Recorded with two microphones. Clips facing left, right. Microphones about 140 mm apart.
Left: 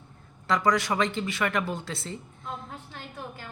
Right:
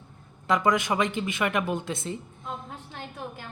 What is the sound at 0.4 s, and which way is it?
A woman's voice, 20° right (ahead or behind).